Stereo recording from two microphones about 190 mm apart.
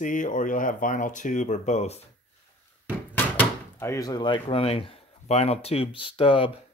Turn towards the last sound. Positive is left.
turn(degrees=30)  # may be behind; listen again after turning